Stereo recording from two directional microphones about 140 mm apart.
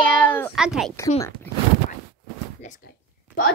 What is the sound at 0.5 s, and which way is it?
Speech, 5° right (ahead or behind).